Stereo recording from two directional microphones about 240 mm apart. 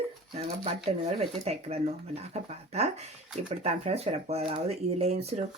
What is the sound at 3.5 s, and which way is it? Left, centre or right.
Speech, right.